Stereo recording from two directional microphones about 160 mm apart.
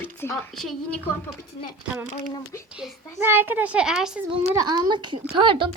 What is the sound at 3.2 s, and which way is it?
Speech, 15° right (ahead or behind).